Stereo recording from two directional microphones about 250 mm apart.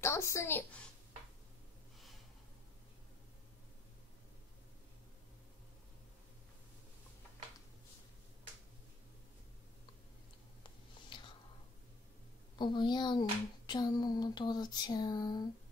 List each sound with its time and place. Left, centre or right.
0.0 s a woman's voice: centre
11.1 s whispering: centre
12.5 s speech: centre